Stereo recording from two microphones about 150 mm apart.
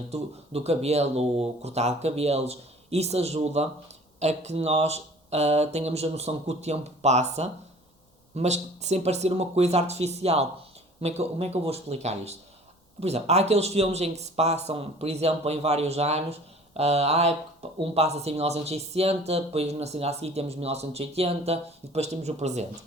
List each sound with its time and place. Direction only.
0.1 s speech: 45° right (ahead or behind)